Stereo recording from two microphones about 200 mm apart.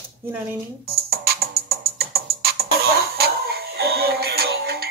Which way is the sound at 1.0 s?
50° right (ahead or behind).